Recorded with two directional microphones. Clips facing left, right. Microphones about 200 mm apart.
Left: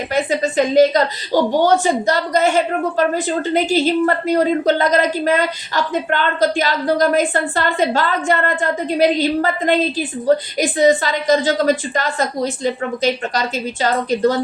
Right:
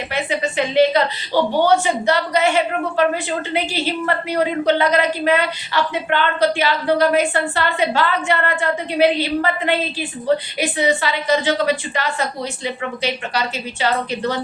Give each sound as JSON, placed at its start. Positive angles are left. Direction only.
{"t": 0.1, "sound": "a woman's voice", "side_deg": 40}